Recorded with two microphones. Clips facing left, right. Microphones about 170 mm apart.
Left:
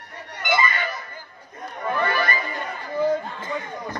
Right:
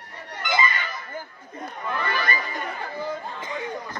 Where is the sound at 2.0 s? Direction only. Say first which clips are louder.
Left 5 dB; 50° left (ahead or behind).